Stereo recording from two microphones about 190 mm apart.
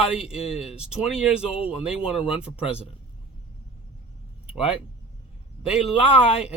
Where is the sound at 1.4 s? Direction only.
30° left (ahead or behind).